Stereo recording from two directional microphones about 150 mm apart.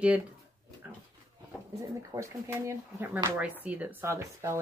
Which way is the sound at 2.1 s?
20° right (ahead or behind).